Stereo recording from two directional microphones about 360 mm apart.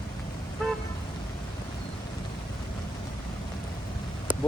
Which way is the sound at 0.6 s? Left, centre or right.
Centre.